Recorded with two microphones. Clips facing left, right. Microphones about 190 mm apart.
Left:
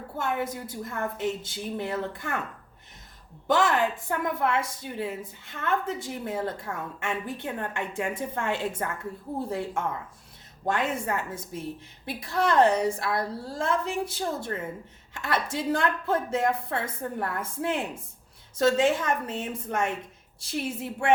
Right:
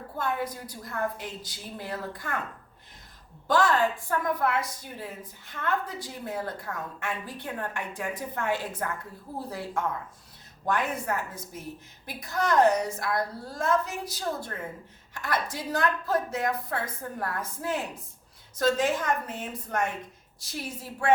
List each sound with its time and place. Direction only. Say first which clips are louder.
0.2 s a woman's voice: left 1 dB; 25° left (ahead or behind)
3.4 s a woman's voice: even; 20° left (ahead or behind)